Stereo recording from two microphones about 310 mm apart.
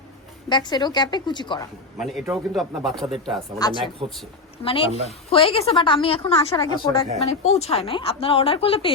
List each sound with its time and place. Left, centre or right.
0.4 s a woman's voice: centre
2.0 s speech: centre
3.6 s a woman's voice: centre